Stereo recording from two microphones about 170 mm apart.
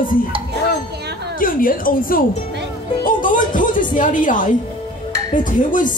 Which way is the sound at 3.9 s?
50° left (ahead or behind).